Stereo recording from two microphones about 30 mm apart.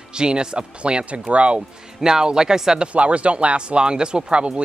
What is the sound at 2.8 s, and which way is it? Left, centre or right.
Speech, right.